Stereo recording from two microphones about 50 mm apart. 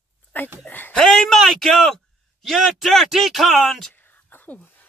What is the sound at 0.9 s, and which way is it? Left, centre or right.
Speech, centre.